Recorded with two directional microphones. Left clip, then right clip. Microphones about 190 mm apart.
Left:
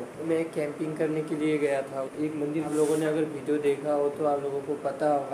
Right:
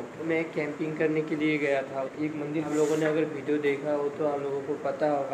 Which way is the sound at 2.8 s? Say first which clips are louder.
Even; 15° left (ahead or behind).